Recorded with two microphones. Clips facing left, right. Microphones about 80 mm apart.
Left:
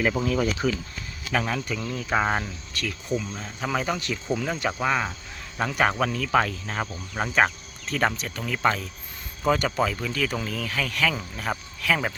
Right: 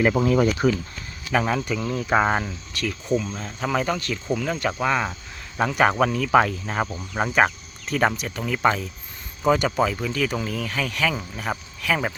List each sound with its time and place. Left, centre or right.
0.2 s speech: right
1.3 s speech: centre
2.2 s speech: centre
3.2 s speech: centre
3.9 s speech: centre